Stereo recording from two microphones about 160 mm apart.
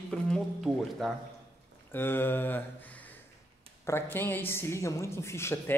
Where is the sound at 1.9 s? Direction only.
15° left (ahead or behind).